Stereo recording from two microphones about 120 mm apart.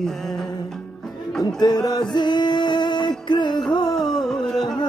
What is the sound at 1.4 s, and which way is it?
Music, 35° left (ahead or behind).